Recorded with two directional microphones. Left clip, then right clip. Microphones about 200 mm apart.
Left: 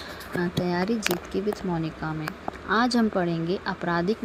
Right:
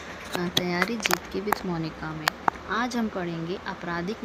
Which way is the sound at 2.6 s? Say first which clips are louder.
Left 5 dB; 30° left (ahead or behind).